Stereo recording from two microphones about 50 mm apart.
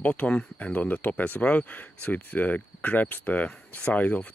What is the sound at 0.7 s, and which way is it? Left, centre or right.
Speech, left.